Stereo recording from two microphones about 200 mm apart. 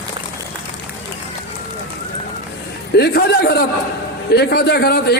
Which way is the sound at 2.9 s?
55° left (ahead or behind).